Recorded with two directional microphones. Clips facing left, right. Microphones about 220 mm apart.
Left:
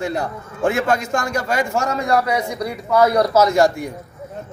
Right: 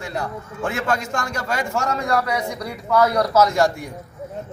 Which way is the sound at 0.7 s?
15° left (ahead or behind).